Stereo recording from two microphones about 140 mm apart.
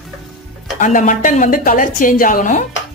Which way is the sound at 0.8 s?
65° left (ahead or behind).